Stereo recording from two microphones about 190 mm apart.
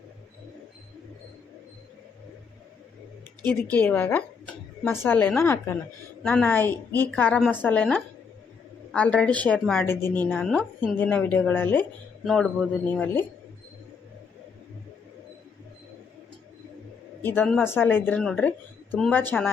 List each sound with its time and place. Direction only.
3.7 s a woman's voice: 10° left (ahead or behind)
17.2 s a woman's voice: 10° left (ahead or behind)